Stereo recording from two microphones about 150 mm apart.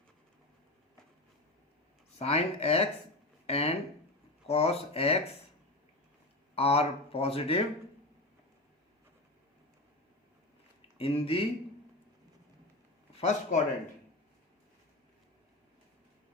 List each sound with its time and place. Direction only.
2.1 s speech: 45° left (ahead or behind)
6.6 s speech: 40° left (ahead or behind)
10.9 s speech: 40° left (ahead or behind)
13.1 s speech: 50° left (ahead or behind)